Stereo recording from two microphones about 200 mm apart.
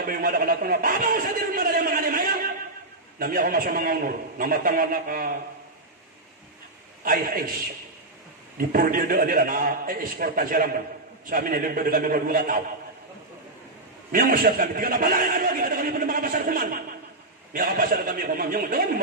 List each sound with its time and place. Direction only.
0.0 s a man's voice: 45° right (ahead or behind)
7.1 s a man's voice: 45° right (ahead or behind)
14.1 s a man's voice: 45° right (ahead or behind)